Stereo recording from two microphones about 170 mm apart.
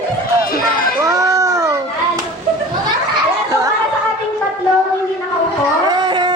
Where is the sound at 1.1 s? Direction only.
20° right (ahead or behind).